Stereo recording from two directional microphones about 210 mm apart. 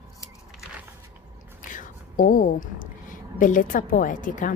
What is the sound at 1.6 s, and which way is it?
Whispering, 40° left (ahead or behind).